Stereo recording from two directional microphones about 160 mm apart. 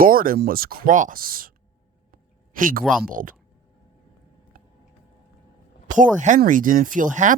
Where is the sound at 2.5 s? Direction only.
60° right (ahead or behind).